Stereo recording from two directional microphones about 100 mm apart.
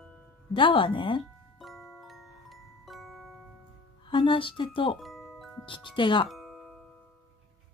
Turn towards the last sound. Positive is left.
turn(degrees=0)  # may be behind; listen again after turning